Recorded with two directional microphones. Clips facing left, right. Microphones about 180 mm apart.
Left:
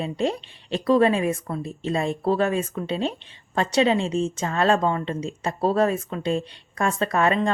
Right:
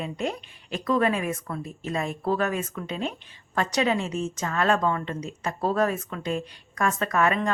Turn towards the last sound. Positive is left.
turn(degrees=30)  # may be behind; listen again after turning